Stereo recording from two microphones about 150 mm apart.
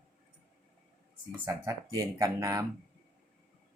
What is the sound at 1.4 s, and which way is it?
Speech, 20° right (ahead or behind).